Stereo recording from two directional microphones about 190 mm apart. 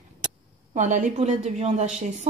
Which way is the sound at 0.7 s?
40° right (ahead or behind).